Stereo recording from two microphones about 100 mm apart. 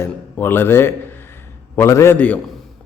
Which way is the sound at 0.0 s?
20° left (ahead or behind).